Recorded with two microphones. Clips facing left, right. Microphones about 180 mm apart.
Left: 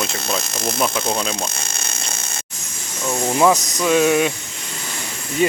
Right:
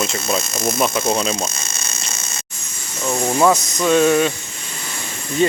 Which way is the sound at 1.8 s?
55° left (ahead or behind).